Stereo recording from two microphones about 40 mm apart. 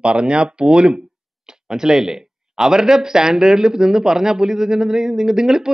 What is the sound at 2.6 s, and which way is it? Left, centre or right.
Speech, centre.